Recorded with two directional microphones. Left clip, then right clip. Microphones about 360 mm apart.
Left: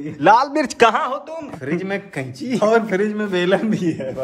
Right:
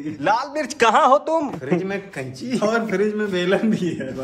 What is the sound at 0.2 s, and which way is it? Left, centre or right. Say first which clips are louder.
A man's voice: left 7 dB; centre.